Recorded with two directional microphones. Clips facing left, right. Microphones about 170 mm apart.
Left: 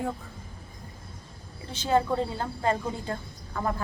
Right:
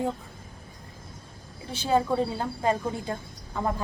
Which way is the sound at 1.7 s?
10° right (ahead or behind).